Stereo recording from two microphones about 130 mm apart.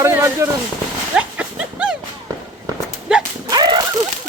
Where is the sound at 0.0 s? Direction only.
20° right (ahead or behind).